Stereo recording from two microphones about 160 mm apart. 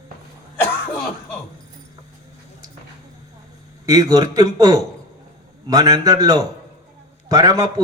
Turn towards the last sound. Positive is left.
turn(degrees=-20)  # may be behind; listen again after turning